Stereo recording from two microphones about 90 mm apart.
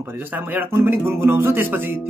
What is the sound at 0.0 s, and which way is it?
A man's voice, 20° right (ahead or behind).